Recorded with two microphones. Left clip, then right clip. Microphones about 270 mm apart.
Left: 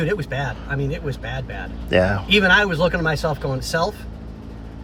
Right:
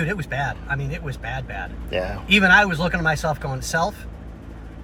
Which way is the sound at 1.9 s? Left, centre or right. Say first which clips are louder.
Left 9 dB; left.